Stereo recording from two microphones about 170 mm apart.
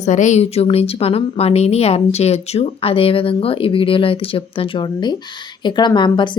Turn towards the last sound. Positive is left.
turn(degrees=25)  # may be behind; listen again after turning